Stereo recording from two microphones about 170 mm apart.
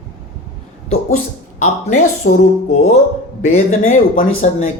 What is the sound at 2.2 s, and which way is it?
Music, 55° left (ahead or behind).